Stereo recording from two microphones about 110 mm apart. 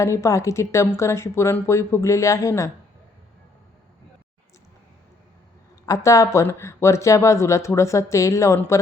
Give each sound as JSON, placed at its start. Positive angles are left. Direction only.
{"t": 0.0, "sound": "speech", "side_deg": 25}
{"t": 5.8, "sound": "speech", "side_deg": 30}